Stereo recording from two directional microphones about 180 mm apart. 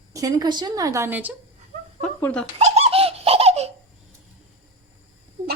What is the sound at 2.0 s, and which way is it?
Speech, 10° left (ahead or behind).